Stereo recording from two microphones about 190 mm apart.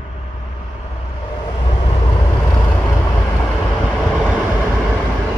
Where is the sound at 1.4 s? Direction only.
30° left (ahead or behind).